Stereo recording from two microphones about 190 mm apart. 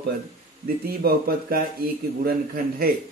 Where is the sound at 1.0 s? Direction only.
50° right (ahead or behind).